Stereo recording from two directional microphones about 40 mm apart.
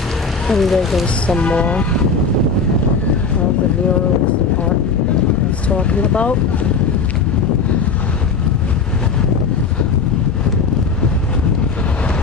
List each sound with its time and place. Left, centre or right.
0.5 s speech: centre
1.2 s speech: left
5.7 s speech: left